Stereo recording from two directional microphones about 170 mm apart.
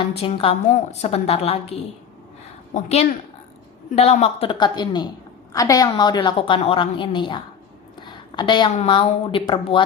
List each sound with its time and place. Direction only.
0.2 s a woman's voice: 30° left (ahead or behind)
8.0 s a sound: 25° left (ahead or behind)
8.7 s speech: 35° left (ahead or behind)